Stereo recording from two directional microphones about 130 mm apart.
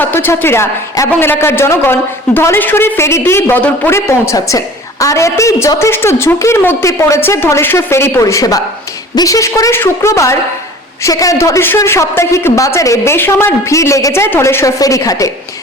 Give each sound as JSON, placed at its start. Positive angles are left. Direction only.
{"t": 0.0, "sound": "a woman's voice", "side_deg": 15}